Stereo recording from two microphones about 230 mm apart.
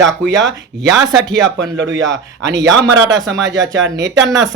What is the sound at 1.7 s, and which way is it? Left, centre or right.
A man's voice, right.